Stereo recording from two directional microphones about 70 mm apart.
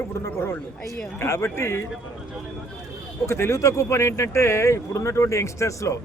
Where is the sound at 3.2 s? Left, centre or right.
Left.